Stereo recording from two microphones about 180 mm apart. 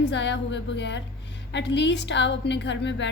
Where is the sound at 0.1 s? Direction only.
80° left.